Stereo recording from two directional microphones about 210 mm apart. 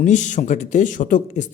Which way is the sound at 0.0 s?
35° left (ahead or behind).